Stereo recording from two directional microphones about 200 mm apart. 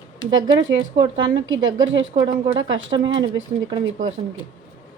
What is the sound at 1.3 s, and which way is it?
Speech, 70° right (ahead or behind).